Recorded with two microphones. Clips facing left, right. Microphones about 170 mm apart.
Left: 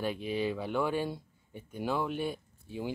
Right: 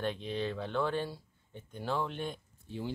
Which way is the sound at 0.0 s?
10° left (ahead or behind).